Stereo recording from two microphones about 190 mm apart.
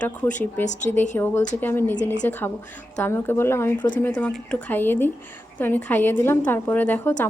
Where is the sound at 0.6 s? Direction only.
40° left (ahead or behind).